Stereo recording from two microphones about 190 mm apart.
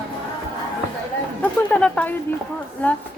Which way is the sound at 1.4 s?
5° left (ahead or behind).